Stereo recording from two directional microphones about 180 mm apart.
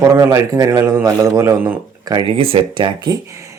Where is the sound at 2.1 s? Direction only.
30° right (ahead or behind).